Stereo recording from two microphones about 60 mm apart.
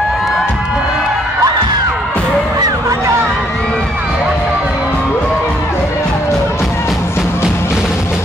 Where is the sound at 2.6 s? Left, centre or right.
Right.